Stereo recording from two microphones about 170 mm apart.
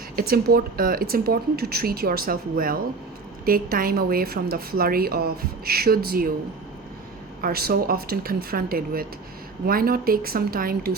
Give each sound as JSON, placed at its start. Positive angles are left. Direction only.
{"t": 0.2, "sound": "a woman's voice", "side_deg": -65}
{"t": 7.4, "sound": "a woman's voice", "side_deg": -65}